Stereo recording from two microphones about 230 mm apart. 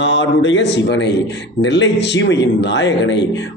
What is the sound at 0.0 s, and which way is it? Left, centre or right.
A man's voice, left.